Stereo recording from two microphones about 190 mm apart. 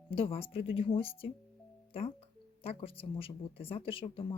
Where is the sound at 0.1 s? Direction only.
30° left (ahead or behind).